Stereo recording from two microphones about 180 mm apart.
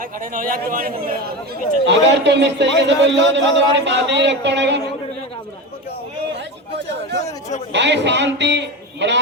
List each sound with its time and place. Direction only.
0.3 s speech: 50° right (ahead or behind)
1.9 s a man's voice: 75° right (ahead or behind)
7.7 s a man's voice: 75° right (ahead or behind)